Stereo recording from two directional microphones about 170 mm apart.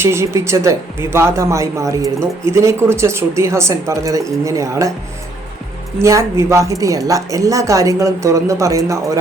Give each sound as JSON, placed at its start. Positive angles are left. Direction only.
{"t": 0.0, "sound": "speech", "side_deg": -15}
{"t": 6.0, "sound": "speech", "side_deg": -15}